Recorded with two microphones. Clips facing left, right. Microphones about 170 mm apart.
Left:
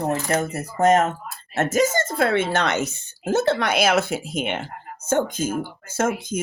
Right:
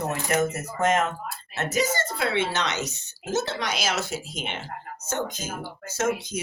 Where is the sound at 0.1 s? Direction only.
30° left (ahead or behind).